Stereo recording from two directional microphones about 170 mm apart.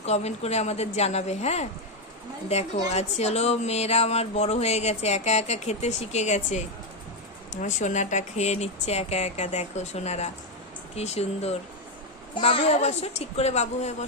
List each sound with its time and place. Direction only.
0.0 s speech: 40° left (ahead or behind)